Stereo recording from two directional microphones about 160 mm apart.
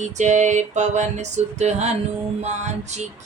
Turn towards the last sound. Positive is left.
turn(degrees=-45)  # may be behind; listen again after turning